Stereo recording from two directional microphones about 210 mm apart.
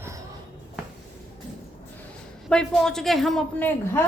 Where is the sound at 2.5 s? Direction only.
5° left (ahead or behind).